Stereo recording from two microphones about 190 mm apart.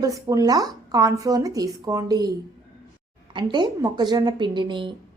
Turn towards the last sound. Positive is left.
turn(degrees=-25)  # may be behind; listen again after turning